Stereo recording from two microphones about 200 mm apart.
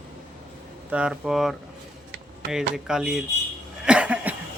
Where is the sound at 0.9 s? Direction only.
5° right (ahead or behind).